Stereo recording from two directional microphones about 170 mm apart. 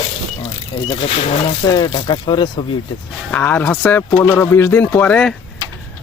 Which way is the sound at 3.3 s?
10° left (ahead or behind).